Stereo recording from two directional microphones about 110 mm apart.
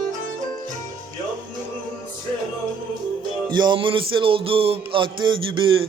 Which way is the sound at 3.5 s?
45° right (ahead or behind).